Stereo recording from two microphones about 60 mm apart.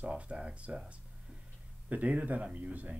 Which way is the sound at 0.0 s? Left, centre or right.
Right.